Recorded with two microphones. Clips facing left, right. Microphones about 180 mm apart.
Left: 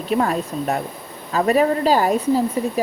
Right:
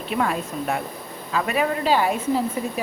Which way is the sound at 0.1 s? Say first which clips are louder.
Left 4 dB; 40° left (ahead or behind).